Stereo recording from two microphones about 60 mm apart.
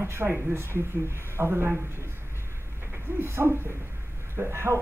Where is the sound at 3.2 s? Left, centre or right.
Right.